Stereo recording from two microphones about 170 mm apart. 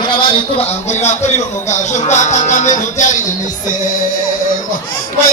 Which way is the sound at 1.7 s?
45° left (ahead or behind).